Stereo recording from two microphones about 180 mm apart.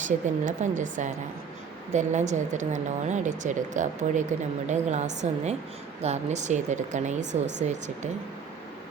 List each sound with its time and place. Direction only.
0.0 s a woman's voice: 45° right (ahead or behind)